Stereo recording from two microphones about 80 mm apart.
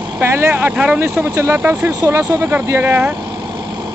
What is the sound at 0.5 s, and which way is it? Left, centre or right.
Speech, centre.